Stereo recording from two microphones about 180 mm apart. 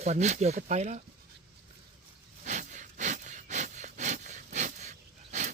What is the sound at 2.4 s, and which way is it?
Sawing, 45° right (ahead or behind).